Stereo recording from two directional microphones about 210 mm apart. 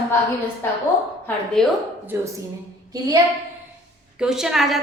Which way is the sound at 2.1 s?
15° right (ahead or behind).